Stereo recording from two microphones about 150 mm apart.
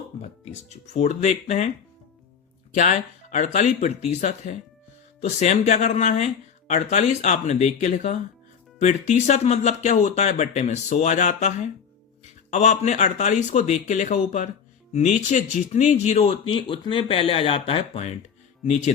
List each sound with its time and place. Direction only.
0.9 s speech: 50° left (ahead or behind)
2.7 s speech: 55° left (ahead or behind)
18.6 s speech: 50° left (ahead or behind)